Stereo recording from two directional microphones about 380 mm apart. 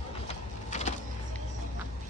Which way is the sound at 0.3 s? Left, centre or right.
Centre.